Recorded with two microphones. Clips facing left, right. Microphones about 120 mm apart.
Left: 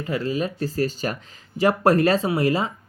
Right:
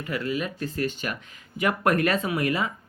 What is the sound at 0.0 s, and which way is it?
Speech, 30° left (ahead or behind).